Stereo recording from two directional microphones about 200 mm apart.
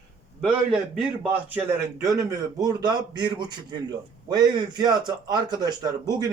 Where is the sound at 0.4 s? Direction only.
5° right (ahead or behind).